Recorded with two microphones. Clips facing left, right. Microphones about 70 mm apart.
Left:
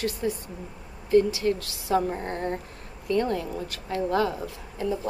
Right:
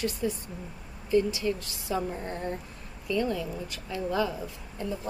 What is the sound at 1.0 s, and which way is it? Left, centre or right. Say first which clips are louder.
Speech: left 4 dB; left.